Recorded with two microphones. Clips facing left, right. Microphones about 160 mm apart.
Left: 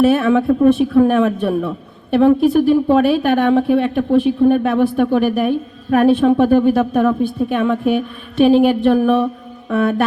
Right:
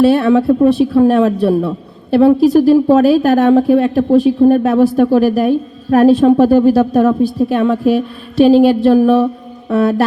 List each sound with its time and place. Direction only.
0.0 s speech: 35° right (ahead or behind)